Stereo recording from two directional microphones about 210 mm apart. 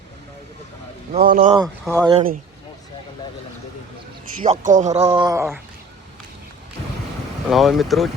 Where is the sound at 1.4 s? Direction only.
20° right (ahead or behind).